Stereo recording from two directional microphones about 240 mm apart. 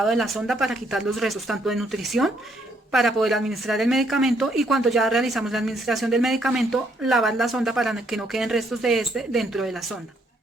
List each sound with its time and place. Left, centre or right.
0.0 s speech: centre